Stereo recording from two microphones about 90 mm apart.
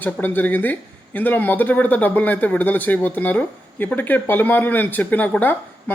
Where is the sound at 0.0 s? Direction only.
20° left (ahead or behind).